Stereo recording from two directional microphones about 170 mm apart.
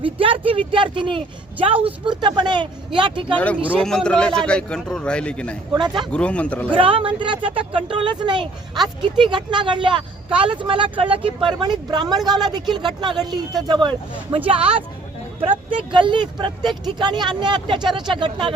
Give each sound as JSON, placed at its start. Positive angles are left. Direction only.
{"t": 0.0, "sound": "speech", "side_deg": -30}
{"t": 3.3, "sound": "a man's voice", "side_deg": 10}
{"t": 5.7, "sound": "speech", "side_deg": -25}
{"t": 6.1, "sound": "speech", "side_deg": 5}
{"t": 6.7, "sound": "speech", "side_deg": -30}